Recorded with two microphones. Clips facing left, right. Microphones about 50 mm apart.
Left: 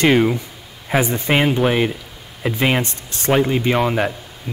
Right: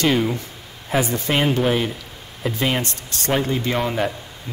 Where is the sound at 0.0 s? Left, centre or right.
Left.